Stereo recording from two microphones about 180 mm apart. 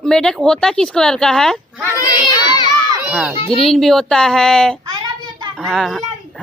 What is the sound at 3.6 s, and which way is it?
Speech, centre (ahead or behind).